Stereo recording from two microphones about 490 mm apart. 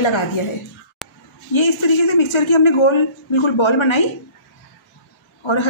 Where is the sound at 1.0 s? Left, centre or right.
Centre.